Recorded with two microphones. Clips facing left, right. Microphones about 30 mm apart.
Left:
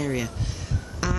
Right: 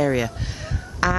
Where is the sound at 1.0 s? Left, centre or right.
Right.